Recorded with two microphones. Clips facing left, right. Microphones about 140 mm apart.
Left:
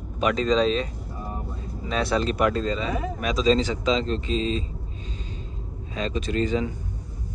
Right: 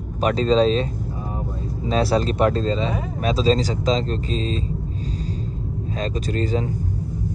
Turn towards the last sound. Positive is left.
turn(degrees=-40)  # may be behind; listen again after turning